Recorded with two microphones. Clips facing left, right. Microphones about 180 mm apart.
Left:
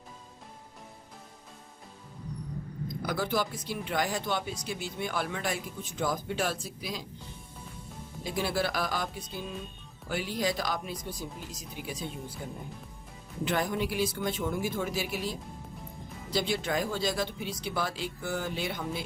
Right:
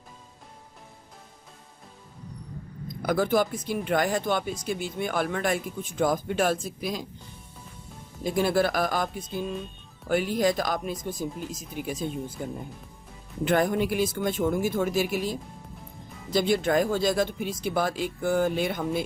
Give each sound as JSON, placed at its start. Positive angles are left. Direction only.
{"t": 3.0, "sound": "speech", "side_deg": -50}
{"t": 8.2, "sound": "speech", "side_deg": -50}
{"t": 13.4, "sound": "speech", "side_deg": -50}